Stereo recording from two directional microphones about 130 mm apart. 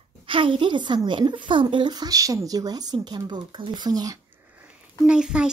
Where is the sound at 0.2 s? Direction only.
40° right (ahead or behind).